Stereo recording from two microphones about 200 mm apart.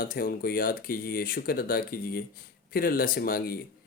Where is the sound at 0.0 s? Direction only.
45° left (ahead or behind).